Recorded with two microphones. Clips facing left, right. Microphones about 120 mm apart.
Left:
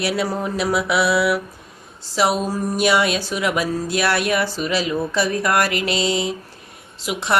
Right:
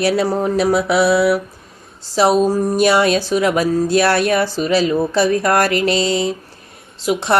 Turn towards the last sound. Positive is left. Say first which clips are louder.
# right 5 dB
turn(degrees=-35)  # may be behind; listen again after turning